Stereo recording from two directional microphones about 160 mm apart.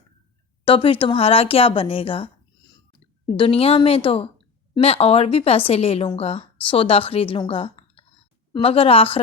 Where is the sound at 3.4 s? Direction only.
35° left (ahead or behind).